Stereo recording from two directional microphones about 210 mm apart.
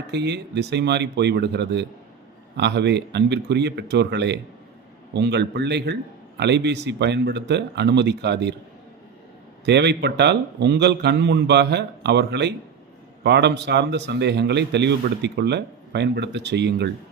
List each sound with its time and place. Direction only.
0.1 s a man's voice: 55° right (ahead or behind)
9.6 s a man's voice: 55° right (ahead or behind)